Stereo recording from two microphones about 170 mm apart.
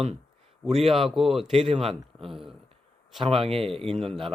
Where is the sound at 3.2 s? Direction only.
35° right (ahead or behind).